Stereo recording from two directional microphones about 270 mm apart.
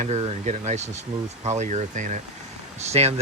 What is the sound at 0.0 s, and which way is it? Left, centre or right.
Speech, right.